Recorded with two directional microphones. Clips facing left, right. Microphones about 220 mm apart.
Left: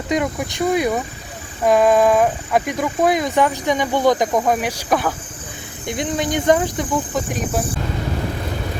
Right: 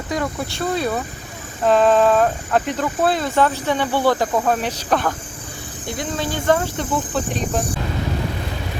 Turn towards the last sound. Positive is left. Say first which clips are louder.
# even
turn(degrees=10)  # may be behind; listen again after turning